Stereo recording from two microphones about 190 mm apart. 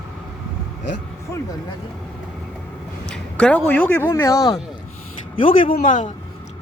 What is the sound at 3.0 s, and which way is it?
A man's voice, 5° left (ahead or behind).